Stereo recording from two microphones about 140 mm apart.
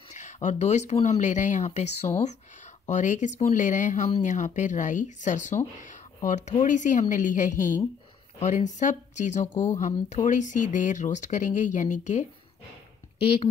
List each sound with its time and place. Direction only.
0.1 s speech: 55° left (ahead or behind)